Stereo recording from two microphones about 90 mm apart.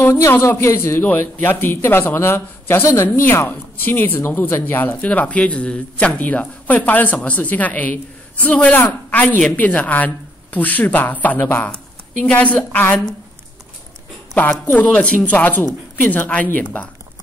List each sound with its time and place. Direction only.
0.0 s a man's voice: 35° left (ahead or behind); by 13.0 s 15° left (ahead or behind)
14.3 s a woman's voice: 15° left (ahead or behind)